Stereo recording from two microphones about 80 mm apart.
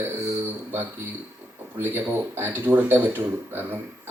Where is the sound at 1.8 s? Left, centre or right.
Right.